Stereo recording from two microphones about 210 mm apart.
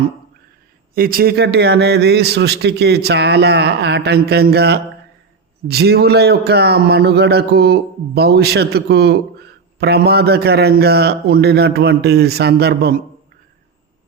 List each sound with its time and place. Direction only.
0.9 s a man's voice: 45° right (ahead or behind)